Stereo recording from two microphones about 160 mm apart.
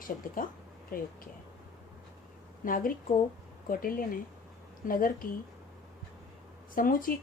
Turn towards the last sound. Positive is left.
turn(degrees=60)  # may be behind; listen again after turning